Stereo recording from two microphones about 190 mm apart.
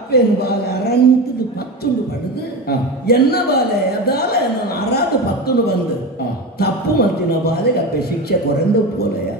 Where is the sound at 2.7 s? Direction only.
55° left (ahead or behind).